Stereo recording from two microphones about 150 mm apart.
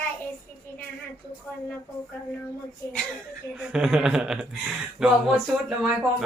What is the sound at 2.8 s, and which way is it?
Speech, 20° left (ahead or behind).